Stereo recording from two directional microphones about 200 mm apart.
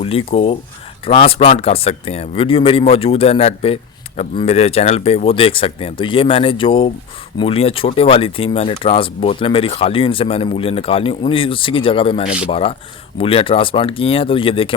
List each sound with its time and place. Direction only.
0.0 s speech: 30° left (ahead or behind)